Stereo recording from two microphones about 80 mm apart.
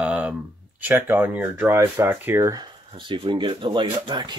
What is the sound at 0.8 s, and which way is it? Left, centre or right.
Speech, right.